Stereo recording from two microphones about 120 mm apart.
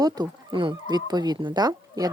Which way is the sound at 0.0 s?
35° right (ahead or behind).